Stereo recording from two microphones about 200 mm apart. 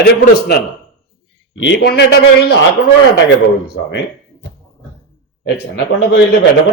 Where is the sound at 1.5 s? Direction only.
65° left (ahead or behind).